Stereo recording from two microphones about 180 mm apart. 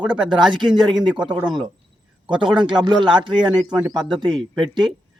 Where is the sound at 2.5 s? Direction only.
25° right (ahead or behind).